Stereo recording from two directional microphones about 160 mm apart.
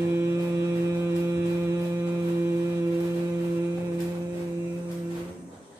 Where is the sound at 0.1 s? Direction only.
15° right (ahead or behind).